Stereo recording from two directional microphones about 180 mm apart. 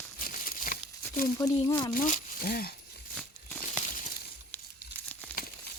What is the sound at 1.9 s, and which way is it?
Speech, 45° left (ahead or behind).